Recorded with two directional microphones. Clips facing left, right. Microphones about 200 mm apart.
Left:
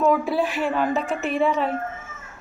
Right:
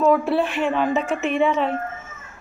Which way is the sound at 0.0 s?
Centre (ahead or behind).